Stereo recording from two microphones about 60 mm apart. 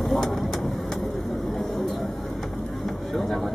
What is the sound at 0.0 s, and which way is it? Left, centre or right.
Vehicle, centre.